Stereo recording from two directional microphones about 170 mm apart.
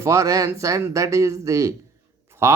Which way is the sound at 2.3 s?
15° right (ahead or behind).